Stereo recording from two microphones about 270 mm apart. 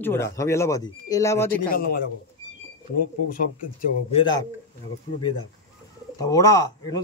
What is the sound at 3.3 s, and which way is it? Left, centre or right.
Speech, left.